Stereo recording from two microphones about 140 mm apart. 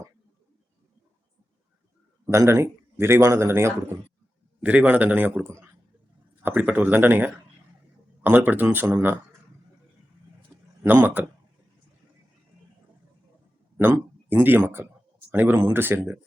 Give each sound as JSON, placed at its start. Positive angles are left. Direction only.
{"t": 2.3, "sound": "speech", "side_deg": -20}
{"t": 10.8, "sound": "speech", "side_deg": -15}
{"t": 13.7, "sound": "speech", "side_deg": -15}